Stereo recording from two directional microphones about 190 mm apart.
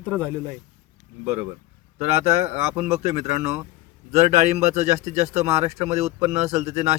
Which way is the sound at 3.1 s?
35° right (ahead or behind).